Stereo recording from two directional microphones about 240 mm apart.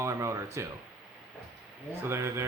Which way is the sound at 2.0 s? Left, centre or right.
Centre.